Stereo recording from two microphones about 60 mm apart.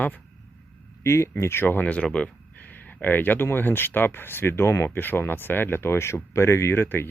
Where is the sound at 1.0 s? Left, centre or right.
Left.